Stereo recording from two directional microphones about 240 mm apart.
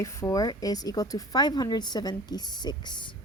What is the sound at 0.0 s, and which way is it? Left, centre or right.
Speech, centre.